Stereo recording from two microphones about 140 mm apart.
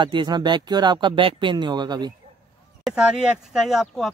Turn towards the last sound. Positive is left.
turn(degrees=0)  # may be behind; listen again after turning